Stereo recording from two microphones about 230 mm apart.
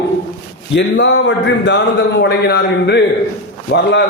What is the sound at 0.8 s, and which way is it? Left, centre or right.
A man's voice, left.